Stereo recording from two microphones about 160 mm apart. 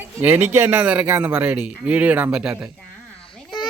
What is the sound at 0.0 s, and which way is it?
Speech, 10° right (ahead or behind).